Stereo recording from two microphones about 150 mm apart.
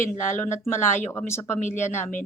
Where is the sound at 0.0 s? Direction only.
55° left (ahead or behind).